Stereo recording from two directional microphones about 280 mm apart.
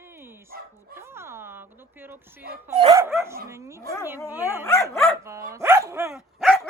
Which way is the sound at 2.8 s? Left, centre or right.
Centre.